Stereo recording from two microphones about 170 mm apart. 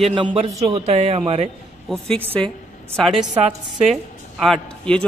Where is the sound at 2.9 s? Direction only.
Centre (ahead or behind).